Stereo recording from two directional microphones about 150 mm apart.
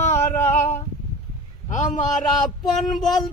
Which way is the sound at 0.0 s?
50° left (ahead or behind).